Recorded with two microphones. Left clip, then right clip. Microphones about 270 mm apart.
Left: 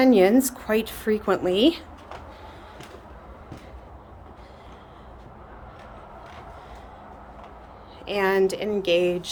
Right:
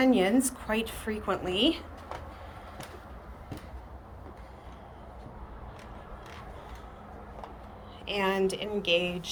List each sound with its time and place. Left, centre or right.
0.0 s a woman's voice: centre
8.0 s speech: centre